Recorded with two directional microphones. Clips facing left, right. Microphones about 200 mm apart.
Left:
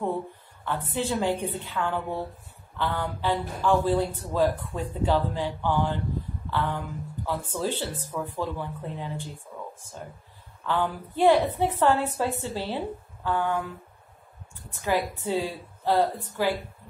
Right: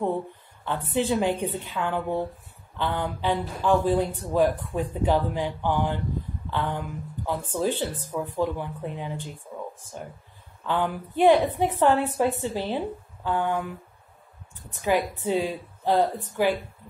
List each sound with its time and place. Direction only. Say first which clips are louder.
0.7 s a woman's voice: right 3 dB; 20° right (ahead or behind)
14.8 s a woman's voice: right 2 dB; 15° right (ahead or behind)